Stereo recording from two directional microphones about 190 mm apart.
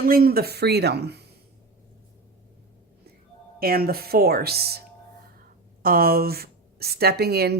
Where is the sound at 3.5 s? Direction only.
50° right (ahead or behind).